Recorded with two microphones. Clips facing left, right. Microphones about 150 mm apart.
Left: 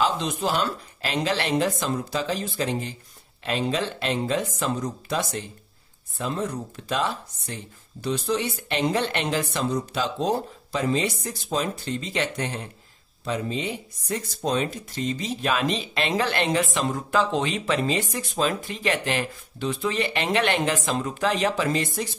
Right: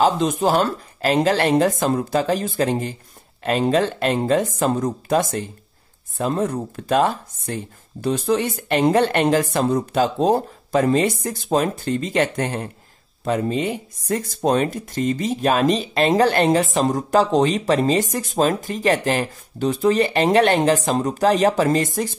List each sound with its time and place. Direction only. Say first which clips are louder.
0.0 s speech: right 7 dB; 40° right (ahead or behind)